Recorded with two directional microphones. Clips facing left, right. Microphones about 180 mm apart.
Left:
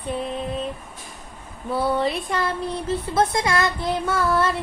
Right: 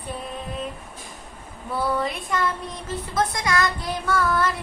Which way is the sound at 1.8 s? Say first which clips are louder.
Left 3 dB; 30° left (ahead or behind).